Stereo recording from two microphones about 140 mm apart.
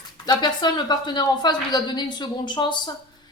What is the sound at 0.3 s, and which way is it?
Speech, 30° left (ahead or behind).